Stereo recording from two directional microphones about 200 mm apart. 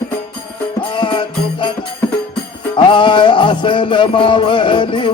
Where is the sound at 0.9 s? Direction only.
25° left (ahead or behind).